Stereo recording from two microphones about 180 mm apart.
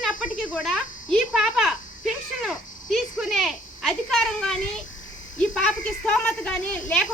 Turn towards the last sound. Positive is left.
turn(degrees=5)  # may be behind; listen again after turning